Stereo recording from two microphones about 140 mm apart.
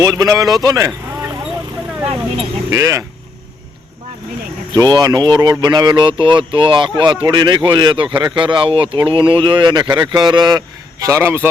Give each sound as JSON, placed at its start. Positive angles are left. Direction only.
{"t": 0.0, "sound": "speech", "side_deg": -25}
{"t": 2.0, "sound": "speech", "side_deg": -40}
{"t": 2.6, "sound": "speech", "side_deg": -20}
{"t": 4.7, "sound": "speech", "side_deg": -30}
{"t": 11.0, "sound": "speech", "side_deg": -20}